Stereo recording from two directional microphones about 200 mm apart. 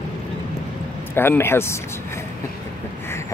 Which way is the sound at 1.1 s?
10° left (ahead or behind).